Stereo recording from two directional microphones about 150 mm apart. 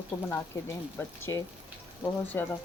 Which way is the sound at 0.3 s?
15° left (ahead or behind).